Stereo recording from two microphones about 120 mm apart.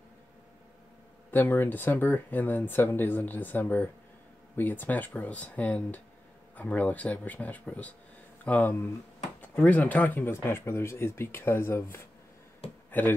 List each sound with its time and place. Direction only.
1.3 s speech: 15° left (ahead or behind)